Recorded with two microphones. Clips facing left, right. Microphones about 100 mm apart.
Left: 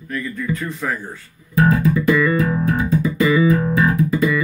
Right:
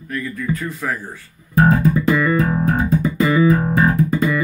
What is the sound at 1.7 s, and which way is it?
Music, 35° right (ahead or behind).